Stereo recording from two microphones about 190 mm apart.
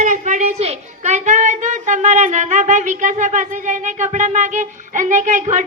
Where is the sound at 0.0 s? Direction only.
40° right (ahead or behind).